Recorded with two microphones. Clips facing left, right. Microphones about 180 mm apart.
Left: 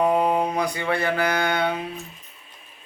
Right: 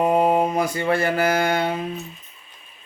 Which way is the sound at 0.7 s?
45° right (ahead or behind).